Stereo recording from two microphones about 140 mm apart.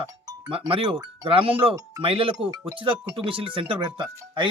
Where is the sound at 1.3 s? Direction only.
40° right (ahead or behind).